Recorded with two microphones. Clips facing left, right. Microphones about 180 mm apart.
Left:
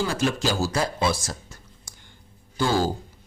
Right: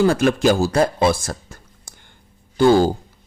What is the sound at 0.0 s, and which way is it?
A man's voice, 55° right (ahead or behind).